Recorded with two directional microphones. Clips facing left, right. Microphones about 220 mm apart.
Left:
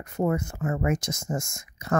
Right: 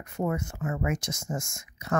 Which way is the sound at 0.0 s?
40° left (ahead or behind).